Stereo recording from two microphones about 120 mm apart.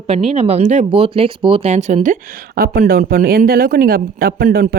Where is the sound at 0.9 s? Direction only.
50° right (ahead or behind); by 2.2 s 80° right.